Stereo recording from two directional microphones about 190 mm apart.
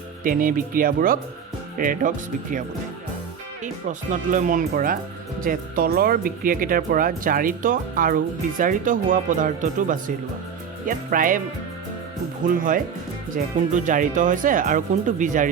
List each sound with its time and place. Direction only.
0.2 s speech: 45° right (ahead or behind)
12.4 s speech: 45° right (ahead or behind)